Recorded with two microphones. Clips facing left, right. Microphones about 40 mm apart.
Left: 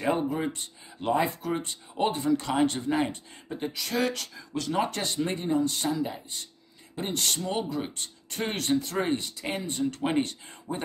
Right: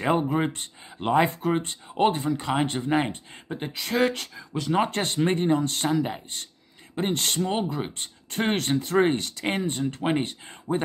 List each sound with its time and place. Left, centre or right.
0.0 s speech: right
4.4 s speech: right
4.7 s speech: right
9.1 s speech: right
9.8 s speech: right
10.0 s speech: right